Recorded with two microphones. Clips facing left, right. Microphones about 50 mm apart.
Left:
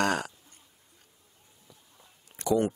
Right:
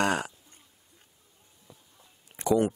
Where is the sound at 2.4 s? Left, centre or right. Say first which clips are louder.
Right 2 dB; right.